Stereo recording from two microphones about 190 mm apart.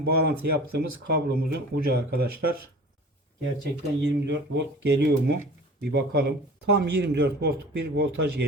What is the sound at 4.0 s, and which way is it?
A man's voice, 65° right (ahead or behind).